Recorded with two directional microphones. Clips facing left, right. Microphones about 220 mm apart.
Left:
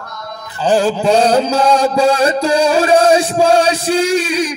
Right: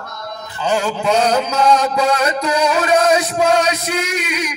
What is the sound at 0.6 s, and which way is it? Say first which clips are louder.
Mantra: left 5 dB; 30° left (ahead or behind).